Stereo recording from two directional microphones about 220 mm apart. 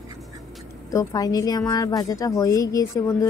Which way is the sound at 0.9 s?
15° left (ahead or behind).